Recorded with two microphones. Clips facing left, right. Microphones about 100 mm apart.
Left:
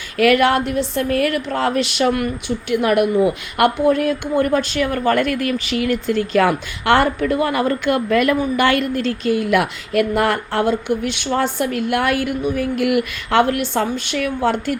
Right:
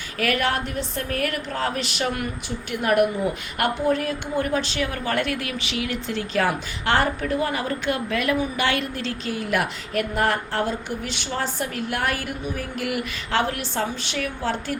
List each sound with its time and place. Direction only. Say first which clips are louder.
0.2 s a woman's voice: left 9 dB; 90° left; by 14.5 s 60° left (ahead or behind)